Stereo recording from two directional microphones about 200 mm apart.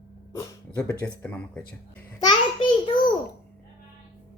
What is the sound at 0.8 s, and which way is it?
Speech, 5° left (ahead or behind).